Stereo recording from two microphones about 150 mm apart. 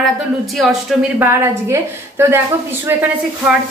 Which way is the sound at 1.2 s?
15° right (ahead or behind).